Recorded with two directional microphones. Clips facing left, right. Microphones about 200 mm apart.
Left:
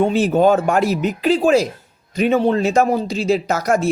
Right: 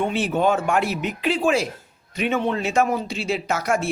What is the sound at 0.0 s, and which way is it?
Speech, 40° left (ahead or behind).